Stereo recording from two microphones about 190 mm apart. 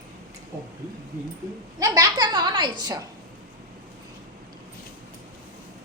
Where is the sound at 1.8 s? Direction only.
20° right (ahead or behind).